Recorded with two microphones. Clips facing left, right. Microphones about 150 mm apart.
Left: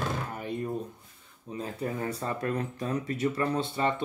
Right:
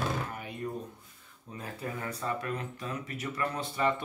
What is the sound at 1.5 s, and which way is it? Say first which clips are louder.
Speech: left 5 dB; 30° left (ahead or behind).